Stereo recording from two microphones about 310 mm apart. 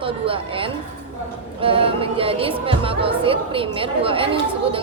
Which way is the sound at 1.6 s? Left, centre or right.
Centre.